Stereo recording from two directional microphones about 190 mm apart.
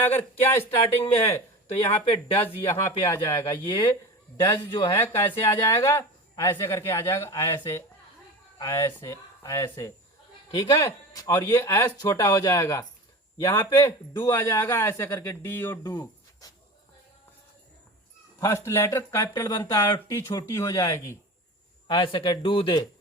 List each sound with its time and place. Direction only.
0.4 s a man's voice: 10° left (ahead or behind)
0.8 s speech: 30° left (ahead or behind)
2.4 s a man's voice: 15° left (ahead or behind)
5.0 s a man's voice: 15° left (ahead or behind)
5.3 s speech: 30° left (ahead or behind)
5.6 s a man's voice: 15° left (ahead or behind)
18.3 s a man's voice: 15° left (ahead or behind)